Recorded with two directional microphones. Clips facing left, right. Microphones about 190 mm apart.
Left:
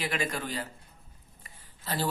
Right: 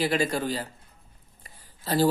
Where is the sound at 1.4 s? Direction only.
35° right (ahead or behind).